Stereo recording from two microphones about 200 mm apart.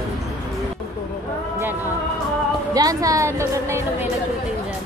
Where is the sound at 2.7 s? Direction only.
15° right (ahead or behind).